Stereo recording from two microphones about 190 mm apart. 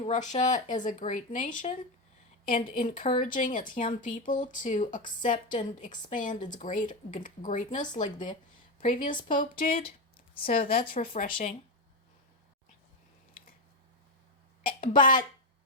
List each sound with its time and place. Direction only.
0.0 s a woman's voice: 40° left (ahead or behind)
14.6 s a woman's voice: 45° left (ahead or behind)